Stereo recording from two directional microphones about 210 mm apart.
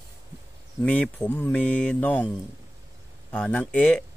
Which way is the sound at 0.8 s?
5° left (ahead or behind).